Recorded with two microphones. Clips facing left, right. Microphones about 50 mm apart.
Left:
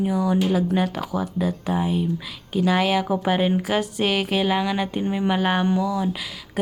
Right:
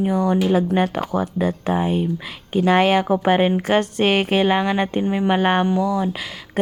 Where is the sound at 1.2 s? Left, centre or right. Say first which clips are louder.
Right 3 dB; right.